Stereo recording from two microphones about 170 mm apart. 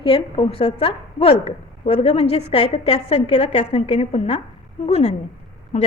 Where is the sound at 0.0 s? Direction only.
35° left (ahead or behind).